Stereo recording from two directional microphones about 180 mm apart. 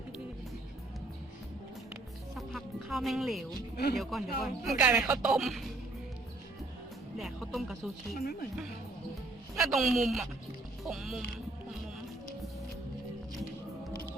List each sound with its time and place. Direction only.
1.9 s music: centre (ahead or behind)
3.9 s speech: centre (ahead or behind)
7.2 s speech: centre (ahead or behind)
8.2 s speech: 55° left (ahead or behind)
9.6 s speech: centre (ahead or behind)